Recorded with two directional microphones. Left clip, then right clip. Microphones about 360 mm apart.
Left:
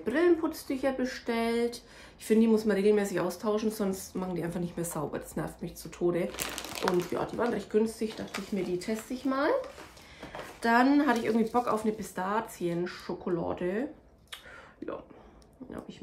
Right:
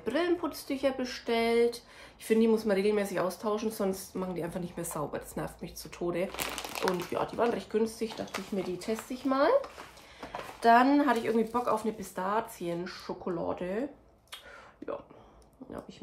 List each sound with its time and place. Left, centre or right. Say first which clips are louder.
0.0 s speech: left 4 dB; centre
6.3 s speech: right 1 dB; centre
6.8 s speech: left 2 dB; centre
10.6 s speech: right 2 dB; centre
15.6 s a sound: left 1 dB; centre